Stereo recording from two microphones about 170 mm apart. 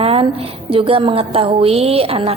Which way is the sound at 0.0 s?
35° right (ahead or behind).